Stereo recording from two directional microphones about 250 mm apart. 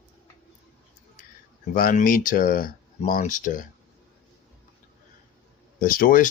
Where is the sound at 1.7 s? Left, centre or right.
Left.